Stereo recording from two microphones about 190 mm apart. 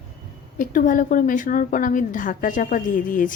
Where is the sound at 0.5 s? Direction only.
45° left (ahead or behind).